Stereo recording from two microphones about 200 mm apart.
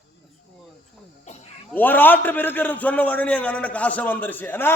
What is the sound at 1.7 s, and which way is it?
A man's voice, 10° left (ahead or behind).